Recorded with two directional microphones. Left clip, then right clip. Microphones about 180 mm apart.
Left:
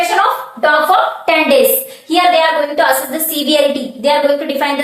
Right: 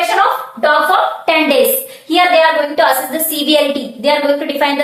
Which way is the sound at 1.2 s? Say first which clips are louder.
Left 2 dB; 10° right (ahead or behind).